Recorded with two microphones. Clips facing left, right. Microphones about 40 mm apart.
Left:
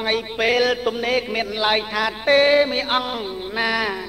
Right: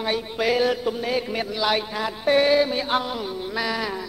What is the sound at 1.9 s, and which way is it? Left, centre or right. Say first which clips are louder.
Music: left 4 dB; left.